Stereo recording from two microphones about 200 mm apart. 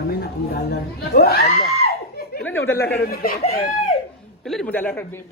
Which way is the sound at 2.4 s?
10° left (ahead or behind).